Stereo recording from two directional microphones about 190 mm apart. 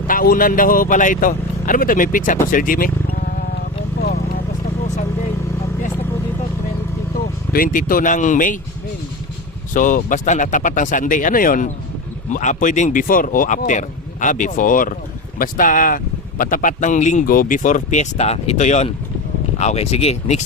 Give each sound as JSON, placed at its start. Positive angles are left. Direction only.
{"t": 0.1, "sound": "speech", "side_deg": 50}
{"t": 7.5, "sound": "speech", "side_deg": 45}
{"t": 9.7, "sound": "speech", "side_deg": 45}